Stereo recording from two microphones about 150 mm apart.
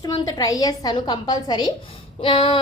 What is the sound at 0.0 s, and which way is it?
A woman's voice, 25° left (ahead or behind).